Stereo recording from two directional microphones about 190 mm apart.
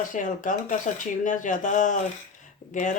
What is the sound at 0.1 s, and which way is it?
Speech, 40° left (ahead or behind).